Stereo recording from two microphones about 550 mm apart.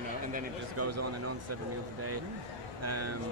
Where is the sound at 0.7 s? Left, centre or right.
Right.